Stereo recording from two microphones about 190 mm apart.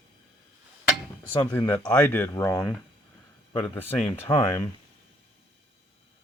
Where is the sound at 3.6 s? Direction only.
10° left (ahead or behind).